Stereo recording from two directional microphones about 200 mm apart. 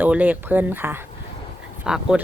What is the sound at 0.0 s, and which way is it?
A woman's voice, 10° right (ahead or behind).